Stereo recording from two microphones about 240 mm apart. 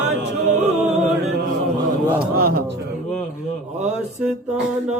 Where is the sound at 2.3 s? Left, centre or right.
Right.